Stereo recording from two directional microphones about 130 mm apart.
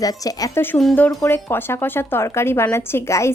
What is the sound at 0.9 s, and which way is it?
Speech, 15° left (ahead or behind).